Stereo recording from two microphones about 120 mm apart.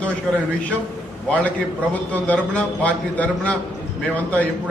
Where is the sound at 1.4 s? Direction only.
10° left (ahead or behind).